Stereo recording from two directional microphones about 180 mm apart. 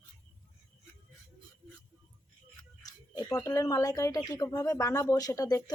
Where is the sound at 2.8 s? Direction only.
20° left (ahead or behind).